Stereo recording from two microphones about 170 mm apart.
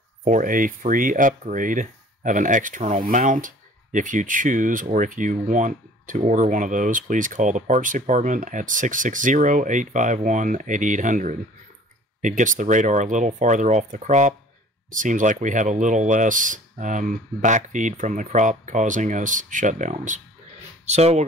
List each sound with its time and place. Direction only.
0.2 s speech: 50° right (ahead or behind)